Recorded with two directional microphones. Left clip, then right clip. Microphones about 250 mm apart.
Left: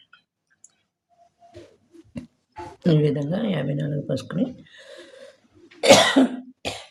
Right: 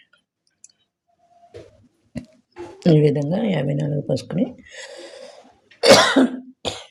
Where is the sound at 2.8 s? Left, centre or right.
Centre.